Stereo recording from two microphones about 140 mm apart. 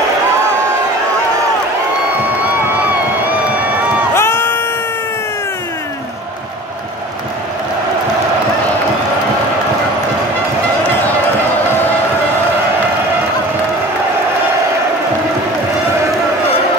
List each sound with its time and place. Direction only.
4.1 s crowd: 15° left (ahead or behind)